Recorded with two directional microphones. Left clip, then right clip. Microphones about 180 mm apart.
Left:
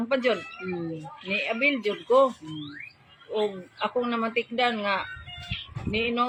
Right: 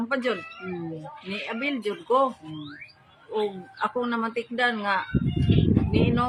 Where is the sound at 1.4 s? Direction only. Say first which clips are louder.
Left 4 dB; 20° right (ahead or behind).